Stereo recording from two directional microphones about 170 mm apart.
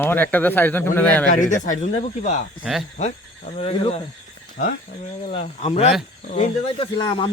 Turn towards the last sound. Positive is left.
turn(degrees=30)  # may be behind; listen again after turning